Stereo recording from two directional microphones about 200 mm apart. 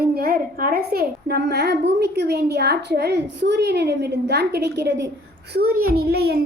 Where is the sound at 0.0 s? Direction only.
50° right (ahead or behind).